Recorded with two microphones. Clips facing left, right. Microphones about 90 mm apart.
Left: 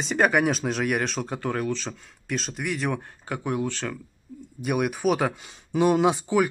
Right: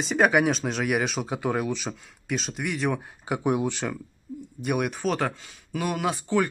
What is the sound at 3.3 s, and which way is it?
Speech, 20° right (ahead or behind).